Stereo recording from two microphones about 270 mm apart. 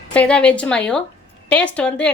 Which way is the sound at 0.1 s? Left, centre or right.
Centre.